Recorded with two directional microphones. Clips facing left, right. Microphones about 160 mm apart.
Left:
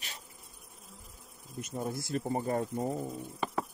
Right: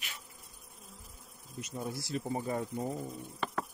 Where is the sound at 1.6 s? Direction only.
50° left (ahead or behind).